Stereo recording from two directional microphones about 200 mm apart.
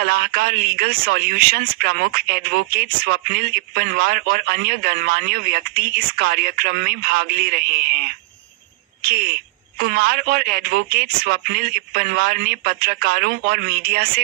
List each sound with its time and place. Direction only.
0.0 s speech: 45° right (ahead or behind)